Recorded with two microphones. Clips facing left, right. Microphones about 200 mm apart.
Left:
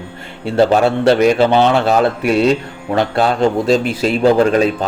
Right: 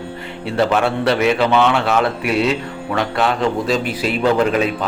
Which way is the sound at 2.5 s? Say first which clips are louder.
Left 4 dB; 40° left (ahead or behind).